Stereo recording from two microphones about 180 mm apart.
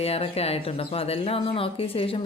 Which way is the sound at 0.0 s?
35° left (ahead or behind).